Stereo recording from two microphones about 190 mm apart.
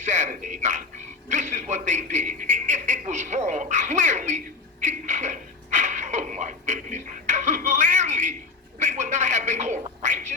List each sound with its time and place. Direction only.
0.0 s dog: 40° right (ahead or behind)
1.3 s a man's voice: 40° right (ahead or behind)
4.8 s a sound: 40° right (ahead or behind)